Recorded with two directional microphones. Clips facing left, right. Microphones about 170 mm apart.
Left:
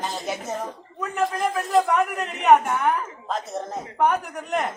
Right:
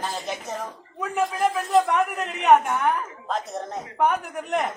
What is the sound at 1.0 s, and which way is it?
A man's voice, centre (ahead or behind).